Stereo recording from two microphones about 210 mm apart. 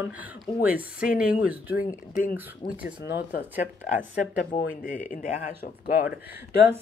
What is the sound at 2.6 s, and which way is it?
Speech, 50° left (ahead or behind).